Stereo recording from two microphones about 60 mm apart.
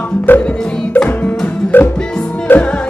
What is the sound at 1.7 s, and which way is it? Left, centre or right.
Music, left.